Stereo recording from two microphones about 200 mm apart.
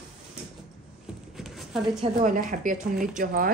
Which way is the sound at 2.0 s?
40° right (ahead or behind).